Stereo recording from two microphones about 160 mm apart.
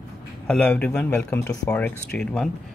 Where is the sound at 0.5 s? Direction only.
5° left (ahead or behind).